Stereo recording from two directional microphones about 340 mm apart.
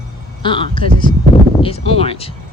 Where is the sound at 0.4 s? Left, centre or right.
Centre.